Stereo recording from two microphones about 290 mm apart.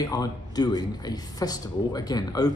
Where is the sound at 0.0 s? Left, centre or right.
Centre.